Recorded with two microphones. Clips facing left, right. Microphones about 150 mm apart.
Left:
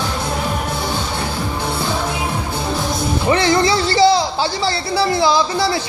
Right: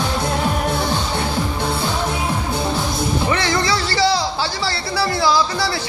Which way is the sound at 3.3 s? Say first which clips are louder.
Left 9 dB; 25° left (ahead or behind).